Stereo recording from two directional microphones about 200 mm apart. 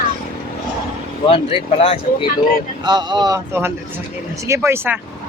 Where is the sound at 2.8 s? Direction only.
20° right (ahead or behind).